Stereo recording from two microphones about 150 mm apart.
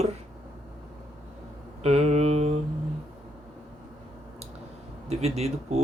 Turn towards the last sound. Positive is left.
turn(degrees=-45)  # may be behind; listen again after turning